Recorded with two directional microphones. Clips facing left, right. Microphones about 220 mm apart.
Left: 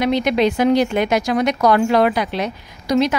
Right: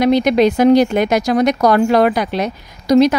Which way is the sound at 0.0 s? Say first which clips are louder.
Right 5 dB; 40° right (ahead or behind).